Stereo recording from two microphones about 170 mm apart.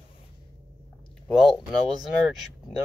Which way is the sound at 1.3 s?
Centre (ahead or behind).